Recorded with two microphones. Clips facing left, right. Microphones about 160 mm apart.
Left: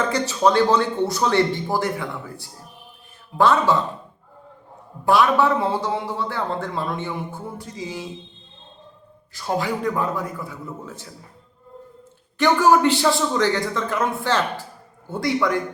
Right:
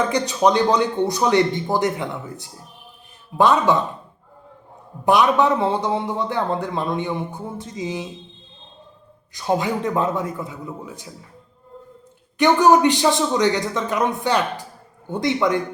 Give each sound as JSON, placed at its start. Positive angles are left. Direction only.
{"t": 0.1, "sound": "a man's voice", "side_deg": -15}
{"t": 5.0, "sound": "speech", "side_deg": -20}
{"t": 9.3, "sound": "speech", "side_deg": -20}
{"t": 12.4, "sound": "speech", "side_deg": -20}